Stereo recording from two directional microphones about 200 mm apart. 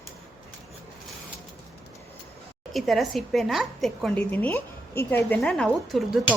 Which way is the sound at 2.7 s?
Centre (ahead or behind).